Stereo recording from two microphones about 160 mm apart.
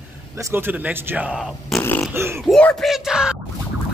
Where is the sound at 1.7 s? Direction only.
15° left (ahead or behind).